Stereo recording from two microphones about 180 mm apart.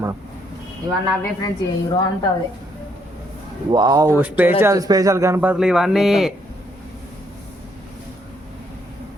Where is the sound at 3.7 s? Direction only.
20° right (ahead or behind).